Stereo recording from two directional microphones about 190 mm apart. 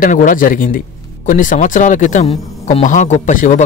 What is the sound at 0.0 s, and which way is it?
Speech, 45° left (ahead or behind).